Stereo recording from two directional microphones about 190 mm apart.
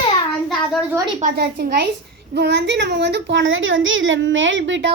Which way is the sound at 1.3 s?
60° right (ahead or behind).